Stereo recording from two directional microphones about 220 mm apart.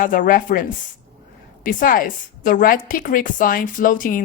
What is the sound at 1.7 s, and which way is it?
Speech, 40° left (ahead or behind).